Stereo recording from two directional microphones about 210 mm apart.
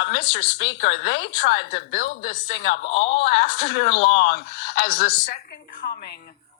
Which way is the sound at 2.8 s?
30° left (ahead or behind).